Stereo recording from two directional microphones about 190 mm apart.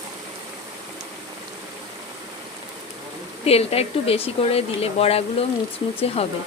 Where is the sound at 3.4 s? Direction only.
30° left (ahead or behind).